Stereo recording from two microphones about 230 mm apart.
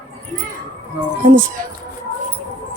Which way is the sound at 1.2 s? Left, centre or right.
Right.